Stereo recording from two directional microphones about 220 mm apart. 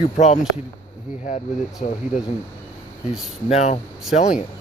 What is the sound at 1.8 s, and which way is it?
Speech, 35° left (ahead or behind).